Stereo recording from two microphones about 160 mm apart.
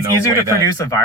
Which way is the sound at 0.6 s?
20° left (ahead or behind).